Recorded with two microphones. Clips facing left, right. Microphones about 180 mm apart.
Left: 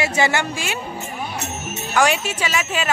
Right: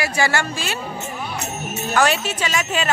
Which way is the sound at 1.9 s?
15° left (ahead or behind).